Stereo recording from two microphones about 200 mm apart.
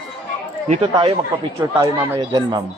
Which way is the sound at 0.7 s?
30° right (ahead or behind).